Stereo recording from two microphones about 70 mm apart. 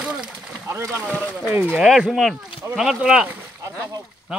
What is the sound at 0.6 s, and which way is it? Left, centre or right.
Speech, right.